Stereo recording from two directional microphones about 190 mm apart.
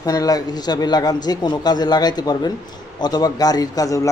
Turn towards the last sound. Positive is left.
turn(degrees=15)  # may be behind; listen again after turning